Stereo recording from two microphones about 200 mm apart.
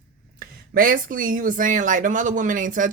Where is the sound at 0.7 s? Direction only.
45° right (ahead or behind).